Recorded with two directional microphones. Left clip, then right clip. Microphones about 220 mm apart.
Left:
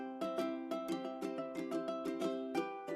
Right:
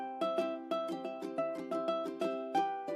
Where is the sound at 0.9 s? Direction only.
30° right (ahead or behind).